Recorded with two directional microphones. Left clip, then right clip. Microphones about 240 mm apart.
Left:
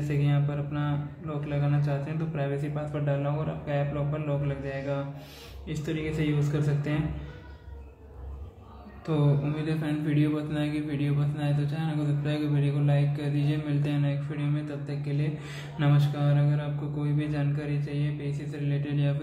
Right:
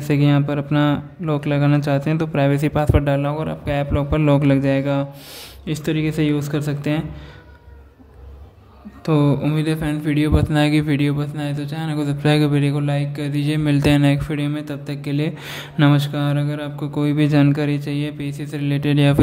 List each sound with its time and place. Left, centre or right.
0.1 s speech: right
9.0 s speech: right